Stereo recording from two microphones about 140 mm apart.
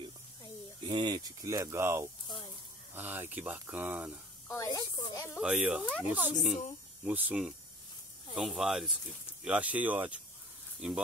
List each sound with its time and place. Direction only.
0.8 s speech: 35° right (ahead or behind)
2.2 s a sound: 35° left (ahead or behind)
2.9 s speech: 15° right (ahead or behind)
4.5 s speech: 20° left (ahead or behind)
5.4 s speech: 5° right (ahead or behind)